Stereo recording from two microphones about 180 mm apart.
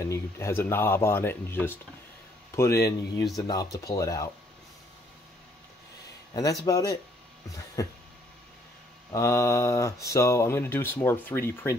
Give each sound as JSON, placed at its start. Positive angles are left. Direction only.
{"t": 0.0, "sound": "speech", "side_deg": 15}
{"t": 6.3, "sound": "speech", "side_deg": 20}
{"t": 9.1, "sound": "speech", "side_deg": 15}